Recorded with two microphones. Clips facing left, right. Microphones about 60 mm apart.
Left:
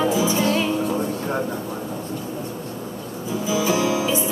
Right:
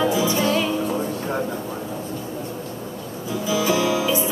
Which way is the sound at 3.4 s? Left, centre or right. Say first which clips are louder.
Even; centre.